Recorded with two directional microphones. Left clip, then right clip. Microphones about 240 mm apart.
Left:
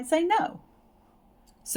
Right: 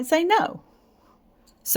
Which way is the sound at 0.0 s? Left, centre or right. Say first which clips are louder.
Right 4 dB; right.